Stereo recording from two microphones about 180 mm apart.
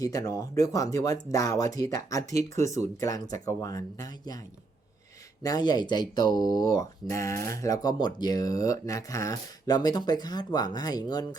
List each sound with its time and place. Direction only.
0.0 s speech: 20° left (ahead or behind)
5.4 s speech: 20° left (ahead or behind)